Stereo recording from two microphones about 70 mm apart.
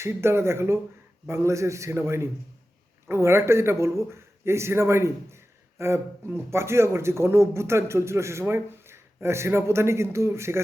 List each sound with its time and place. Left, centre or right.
0.0 s a man's voice: right